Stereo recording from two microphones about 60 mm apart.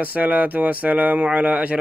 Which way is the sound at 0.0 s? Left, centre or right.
Right.